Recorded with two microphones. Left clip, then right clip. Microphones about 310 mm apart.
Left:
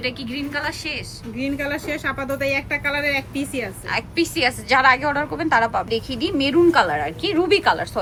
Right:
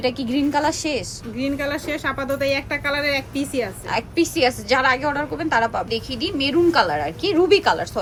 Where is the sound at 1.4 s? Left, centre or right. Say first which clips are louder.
Right 1 dB; centre.